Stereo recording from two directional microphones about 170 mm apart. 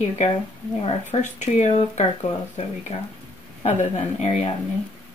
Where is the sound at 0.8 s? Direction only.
40° left (ahead or behind).